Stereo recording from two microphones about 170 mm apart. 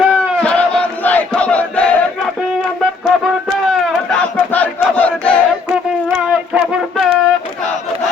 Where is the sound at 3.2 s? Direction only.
Centre (ahead or behind).